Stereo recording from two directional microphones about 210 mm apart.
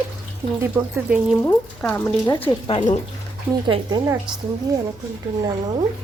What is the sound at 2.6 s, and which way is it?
Speech, 25° left (ahead or behind).